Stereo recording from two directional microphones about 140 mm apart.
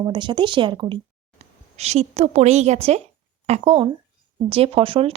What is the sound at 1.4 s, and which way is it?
A woman's voice, 50° right (ahead or behind).